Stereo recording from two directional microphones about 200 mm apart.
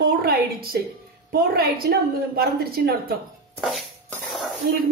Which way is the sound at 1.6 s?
50° right (ahead or behind).